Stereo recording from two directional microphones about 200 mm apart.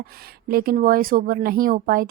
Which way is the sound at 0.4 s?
50° right (ahead or behind).